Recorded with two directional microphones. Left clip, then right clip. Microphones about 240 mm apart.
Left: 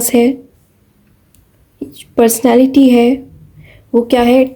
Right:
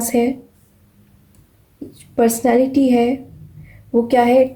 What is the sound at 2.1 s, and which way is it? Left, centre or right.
A woman's voice, left.